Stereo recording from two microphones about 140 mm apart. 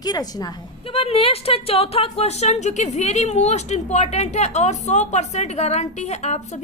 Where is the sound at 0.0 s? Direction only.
30° left (ahead or behind).